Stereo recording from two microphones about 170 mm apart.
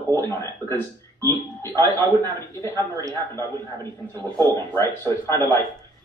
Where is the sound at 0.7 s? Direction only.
15° left (ahead or behind).